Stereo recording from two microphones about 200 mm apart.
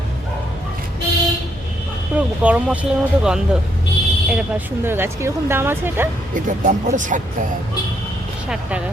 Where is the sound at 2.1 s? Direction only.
5° right (ahead or behind).